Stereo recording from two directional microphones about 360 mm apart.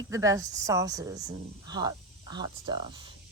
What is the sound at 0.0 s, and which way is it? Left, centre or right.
Speech, centre.